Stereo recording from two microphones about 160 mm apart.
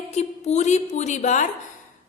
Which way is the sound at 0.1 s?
45° left (ahead or behind).